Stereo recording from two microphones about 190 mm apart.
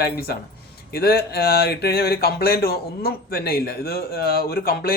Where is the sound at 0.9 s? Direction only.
55° left (ahead or behind).